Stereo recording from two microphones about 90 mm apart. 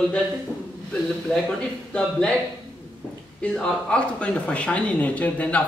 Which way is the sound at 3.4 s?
15° left (ahead or behind).